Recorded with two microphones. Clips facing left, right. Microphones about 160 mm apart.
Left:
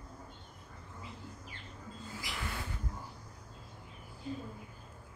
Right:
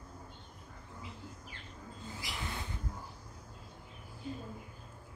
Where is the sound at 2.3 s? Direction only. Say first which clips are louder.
Left 1 dB; 20° right (ahead or behind).